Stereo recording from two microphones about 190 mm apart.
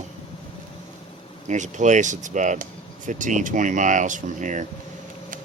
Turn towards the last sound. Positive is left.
turn(degrees=-40)  # may be behind; listen again after turning